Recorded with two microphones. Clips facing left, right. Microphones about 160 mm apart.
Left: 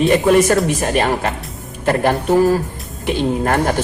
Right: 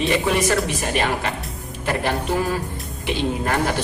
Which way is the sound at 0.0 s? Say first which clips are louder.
Left 7 dB; 50° left (ahead or behind).